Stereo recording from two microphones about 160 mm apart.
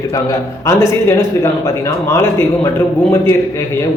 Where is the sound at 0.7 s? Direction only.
15° left (ahead or behind).